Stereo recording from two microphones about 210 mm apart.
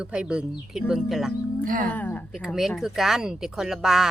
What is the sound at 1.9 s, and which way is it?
A woman's voice, 10° left (ahead or behind).